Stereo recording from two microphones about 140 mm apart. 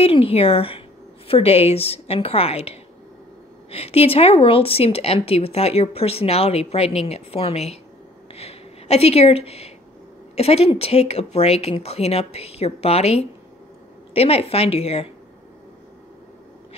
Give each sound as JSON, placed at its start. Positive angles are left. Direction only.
{"t": 0.0, "sound": "a woman's voice", "side_deg": 45}